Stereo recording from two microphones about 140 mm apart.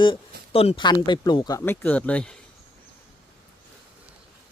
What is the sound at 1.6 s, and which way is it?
Speech, 15° left (ahead or behind).